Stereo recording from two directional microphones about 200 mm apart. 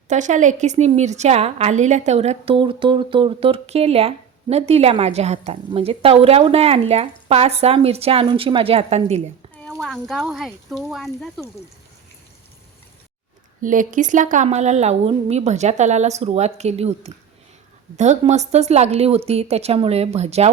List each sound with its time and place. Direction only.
0.1 s a woman's voice: 35° right (ahead or behind)
9.8 s speech: centre (ahead or behind)
13.6 s a woman's voice: 40° right (ahead or behind)